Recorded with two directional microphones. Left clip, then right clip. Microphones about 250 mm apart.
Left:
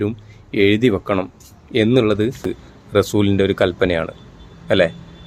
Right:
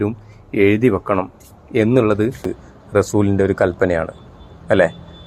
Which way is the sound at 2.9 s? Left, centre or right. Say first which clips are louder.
Even; centre.